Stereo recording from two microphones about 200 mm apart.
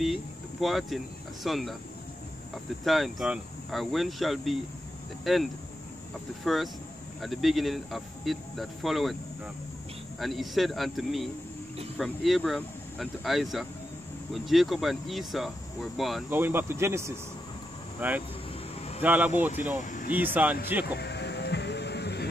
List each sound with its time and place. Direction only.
0.0 s speech: centre (ahead or behind)
2.8 s speech: centre (ahead or behind)
10.1 s speech: centre (ahead or behind)
16.3 s speech: 10° right (ahead or behind)
18.8 s a sound: 30° left (ahead or behind)
19.0 s speech: 10° right (ahead or behind)
20.8 s music: 55° left (ahead or behind)